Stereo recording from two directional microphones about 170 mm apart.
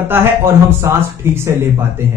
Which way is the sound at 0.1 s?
15° right (ahead or behind).